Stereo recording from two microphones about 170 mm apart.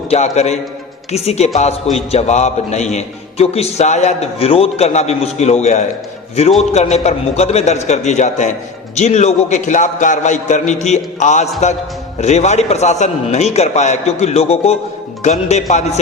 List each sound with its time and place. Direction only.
0.1 s a man's voice: 40° left (ahead or behind)